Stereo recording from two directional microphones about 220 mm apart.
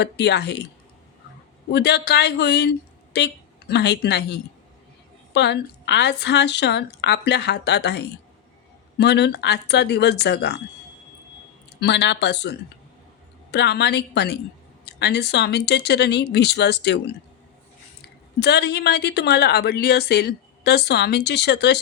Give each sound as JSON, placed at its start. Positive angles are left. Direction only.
{"t": 0.0, "sound": "a woman's voice", "side_deg": 50}
{"t": 1.7, "sound": "a woman's voice", "side_deg": 50}
{"t": 11.8, "sound": "a woman's voice", "side_deg": 50}
{"t": 18.3, "sound": "a woman's voice", "side_deg": 50}